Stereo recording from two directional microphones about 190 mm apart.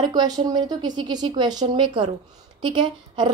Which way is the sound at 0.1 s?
20° right (ahead or behind).